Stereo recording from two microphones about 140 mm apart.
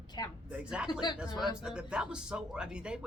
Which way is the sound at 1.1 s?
5° right (ahead or behind).